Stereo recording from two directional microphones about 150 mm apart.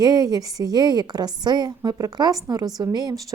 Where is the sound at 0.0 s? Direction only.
25° right (ahead or behind).